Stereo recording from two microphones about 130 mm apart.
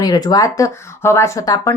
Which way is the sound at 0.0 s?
30° left (ahead or behind).